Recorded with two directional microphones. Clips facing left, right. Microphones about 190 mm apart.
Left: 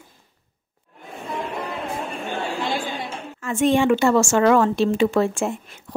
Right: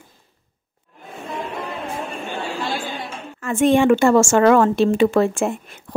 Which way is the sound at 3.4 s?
55° right (ahead or behind).